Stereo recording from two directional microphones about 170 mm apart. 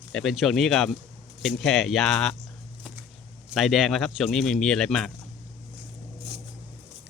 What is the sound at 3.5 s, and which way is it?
Speech, centre (ahead or behind).